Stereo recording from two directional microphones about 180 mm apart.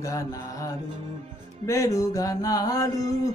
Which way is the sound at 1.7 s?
15° left (ahead or behind).